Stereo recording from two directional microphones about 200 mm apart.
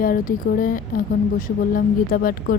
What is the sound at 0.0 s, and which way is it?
Speech, 45° left (ahead or behind).